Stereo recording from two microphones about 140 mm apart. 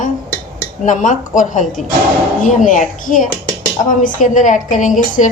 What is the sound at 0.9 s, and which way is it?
A woman's voice, 65° left (ahead or behind).